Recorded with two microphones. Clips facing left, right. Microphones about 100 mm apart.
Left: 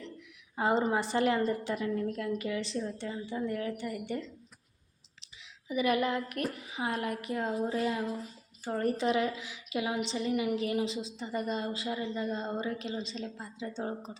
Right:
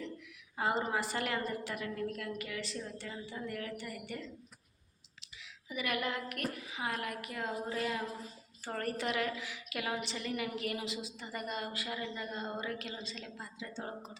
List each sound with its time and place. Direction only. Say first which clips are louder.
0.5 s a woman's voice: left 5 dB; 25° left (ahead or behind)
5.6 s a woman's voice: left 8 dB; 30° left (ahead or behind)
8.6 s a woman's voice: left 7 dB; 15° left (ahead or behind)